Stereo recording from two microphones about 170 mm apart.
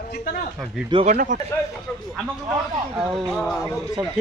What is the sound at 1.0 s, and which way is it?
Speech, 50° right (ahead or behind).